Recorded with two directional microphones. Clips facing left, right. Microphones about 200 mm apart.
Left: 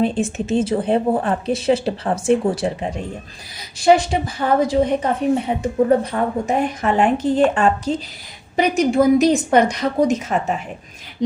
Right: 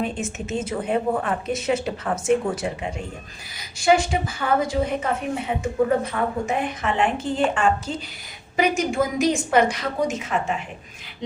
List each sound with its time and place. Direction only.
0.0 s speech: 30° left (ahead or behind)